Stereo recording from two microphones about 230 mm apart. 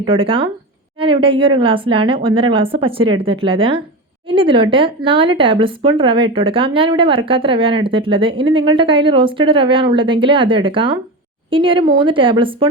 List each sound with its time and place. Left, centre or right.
0.0 s speech: right